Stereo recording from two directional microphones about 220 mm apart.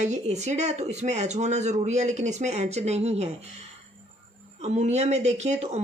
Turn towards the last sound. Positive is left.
turn(degrees=-30)  # may be behind; listen again after turning